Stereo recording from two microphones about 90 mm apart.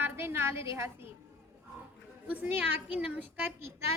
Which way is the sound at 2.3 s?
20° right (ahead or behind).